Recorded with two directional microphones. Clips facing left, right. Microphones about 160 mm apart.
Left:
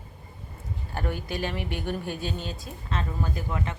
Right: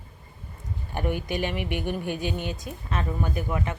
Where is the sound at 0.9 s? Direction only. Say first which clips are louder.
Right 4 dB; 15° right (ahead or behind).